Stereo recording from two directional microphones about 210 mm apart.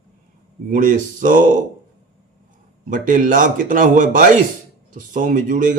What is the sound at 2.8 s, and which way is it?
Speech, 40° right (ahead or behind).